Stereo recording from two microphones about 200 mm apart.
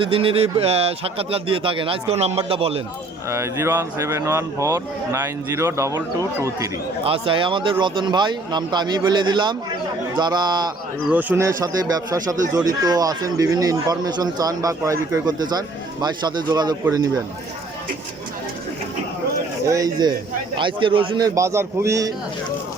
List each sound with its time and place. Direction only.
0.0 s a man's voice: 25° right (ahead or behind)
3.2 s speech: 15° right (ahead or behind)
7.0 s a man's voice: 25° right (ahead or behind)
11.1 s a man's voice: 10° right (ahead or behind)
19.6 s a man's voice: 15° right (ahead or behind)